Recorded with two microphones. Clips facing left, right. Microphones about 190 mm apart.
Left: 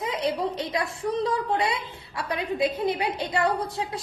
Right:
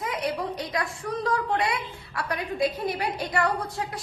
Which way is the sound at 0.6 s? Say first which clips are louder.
Left 2 dB; 25° left (ahead or behind).